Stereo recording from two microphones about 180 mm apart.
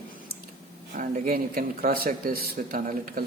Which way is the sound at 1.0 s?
55° right (ahead or behind).